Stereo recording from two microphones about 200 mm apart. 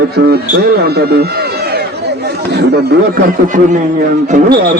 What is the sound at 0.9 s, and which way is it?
Chatter, 55° right (ahead or behind).